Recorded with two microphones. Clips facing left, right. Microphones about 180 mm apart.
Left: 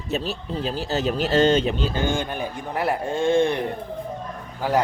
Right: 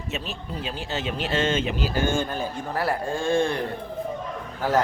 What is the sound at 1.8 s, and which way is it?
Speech, 20° left (ahead or behind).